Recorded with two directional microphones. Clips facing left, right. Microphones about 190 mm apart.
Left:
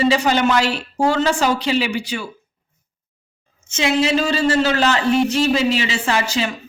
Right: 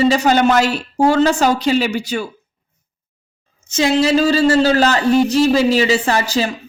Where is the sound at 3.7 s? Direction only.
40° right (ahead or behind).